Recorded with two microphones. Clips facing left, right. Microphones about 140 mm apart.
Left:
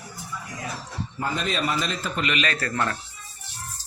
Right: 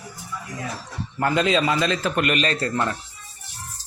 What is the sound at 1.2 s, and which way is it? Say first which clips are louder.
A man's voice: right 7 dB; 90° right.